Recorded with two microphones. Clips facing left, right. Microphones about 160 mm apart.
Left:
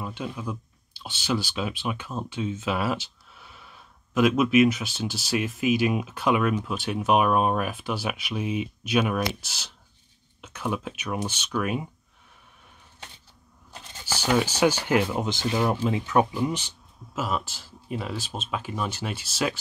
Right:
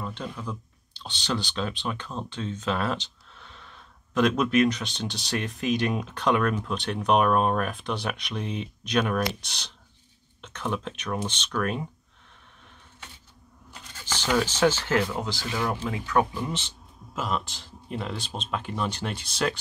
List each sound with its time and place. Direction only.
0.0 s speech: 10° left (ahead or behind)
14.0 s speech: 10° left (ahead or behind)